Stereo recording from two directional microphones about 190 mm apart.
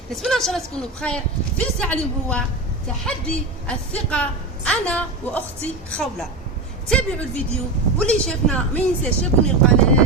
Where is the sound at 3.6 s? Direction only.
5° left (ahead or behind).